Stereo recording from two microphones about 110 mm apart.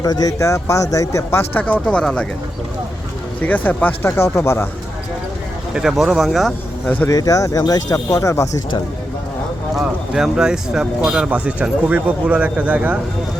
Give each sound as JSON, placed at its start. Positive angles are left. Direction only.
{"t": 0.0, "sound": "speech", "side_deg": 35}
{"t": 3.4, "sound": "speech", "side_deg": 15}
{"t": 5.7, "sound": "speech", "side_deg": -5}
{"t": 6.8, "sound": "speech", "side_deg": 15}
{"t": 7.1, "sound": "speech", "side_deg": 30}
{"t": 9.7, "sound": "speech", "side_deg": -5}